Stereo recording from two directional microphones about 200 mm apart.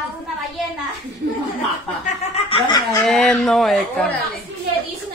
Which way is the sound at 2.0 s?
25° left (ahead or behind).